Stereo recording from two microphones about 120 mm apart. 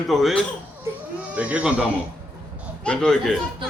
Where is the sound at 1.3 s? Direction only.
10° right (ahead or behind).